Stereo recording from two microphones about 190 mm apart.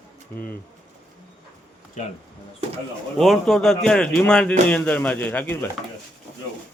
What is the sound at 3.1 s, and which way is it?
Speech, centre (ahead or behind).